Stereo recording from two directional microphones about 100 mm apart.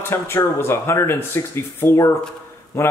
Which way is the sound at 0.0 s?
25° left (ahead or behind).